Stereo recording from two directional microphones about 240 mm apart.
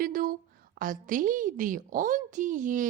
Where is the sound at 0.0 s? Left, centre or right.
Right.